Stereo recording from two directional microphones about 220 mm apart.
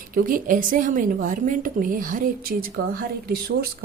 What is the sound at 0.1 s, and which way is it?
A woman's voice, 40° right (ahead or behind).